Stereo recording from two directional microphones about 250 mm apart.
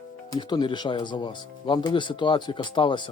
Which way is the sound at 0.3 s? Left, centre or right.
Centre.